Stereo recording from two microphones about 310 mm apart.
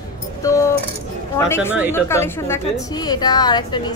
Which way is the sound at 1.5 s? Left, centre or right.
Centre.